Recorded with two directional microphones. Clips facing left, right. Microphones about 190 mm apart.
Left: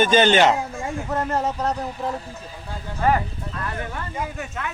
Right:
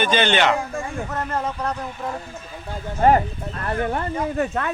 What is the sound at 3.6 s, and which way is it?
Speech, 50° right (ahead or behind).